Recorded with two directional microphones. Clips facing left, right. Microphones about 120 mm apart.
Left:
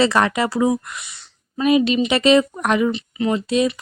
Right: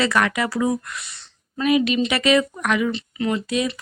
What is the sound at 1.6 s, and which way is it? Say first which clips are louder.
Speech: left 3 dB; 25° left (ahead or behind).